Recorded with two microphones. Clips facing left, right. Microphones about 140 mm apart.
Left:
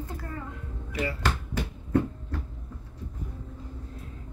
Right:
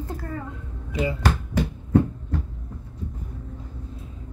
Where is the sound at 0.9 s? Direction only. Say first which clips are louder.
Right 5 dB; 20° right (ahead or behind).